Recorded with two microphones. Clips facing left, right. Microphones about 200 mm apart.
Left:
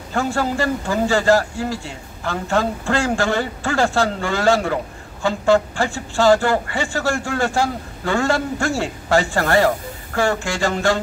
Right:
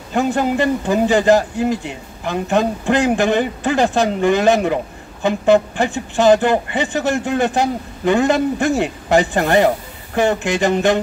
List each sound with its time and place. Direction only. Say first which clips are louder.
0.1 s speech: right 4 dB; 20° right (ahead or behind)